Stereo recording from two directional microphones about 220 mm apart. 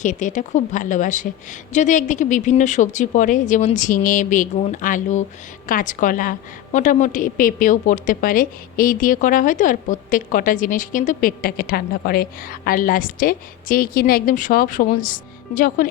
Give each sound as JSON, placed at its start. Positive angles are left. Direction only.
{"t": 0.0, "sound": "a woman's voice", "side_deg": 35}